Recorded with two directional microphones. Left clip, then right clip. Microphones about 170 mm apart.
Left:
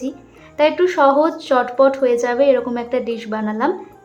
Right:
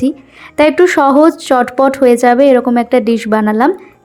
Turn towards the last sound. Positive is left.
turn(degrees=-40)  # may be behind; listen again after turning